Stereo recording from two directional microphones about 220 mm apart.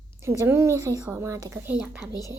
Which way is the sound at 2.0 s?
15° left (ahead or behind).